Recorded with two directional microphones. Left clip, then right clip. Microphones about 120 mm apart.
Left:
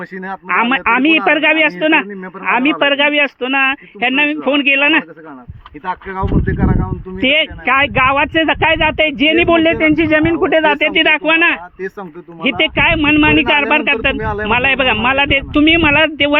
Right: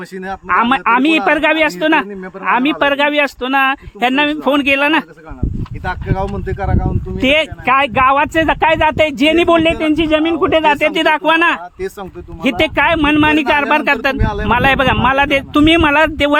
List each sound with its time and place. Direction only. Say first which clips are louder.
0.7 s speech: left 2 dB; 20° right (ahead or behind)
4.0 s a man's voice: even; 45° right (ahead or behind)
4.7 s speech: left 2 dB; 25° right (ahead or behind)
5.8 s speech: right 1 dB; 10° right (ahead or behind)
7.2 s a man's voice: even; 30° right (ahead or behind)
7.6 s speech: even; 10° right (ahead or behind)
8.0 s a man's voice: right 1 dB; 25° right (ahead or behind)
14.2 s speech: left 1 dB; 10° right (ahead or behind)
14.4 s a man's voice: right 1 dB; 40° right (ahead or behind)
15.5 s speech: right 1 dB; 45° right (ahead or behind)
15.9 s a man's voice: even; 30° right (ahead or behind)